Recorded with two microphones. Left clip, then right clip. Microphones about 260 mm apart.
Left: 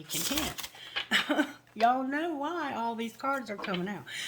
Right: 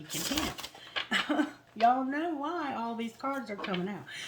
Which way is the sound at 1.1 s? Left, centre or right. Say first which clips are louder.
Left 2 dB; left.